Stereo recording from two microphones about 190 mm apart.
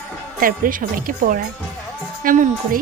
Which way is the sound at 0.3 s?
50° right (ahead or behind).